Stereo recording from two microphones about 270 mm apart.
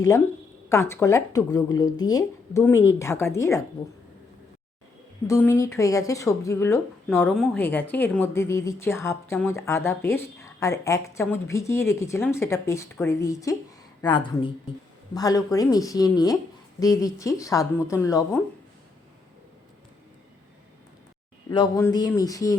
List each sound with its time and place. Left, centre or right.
0.7 s speech: centre
5.3 s speech: centre
21.5 s speech: centre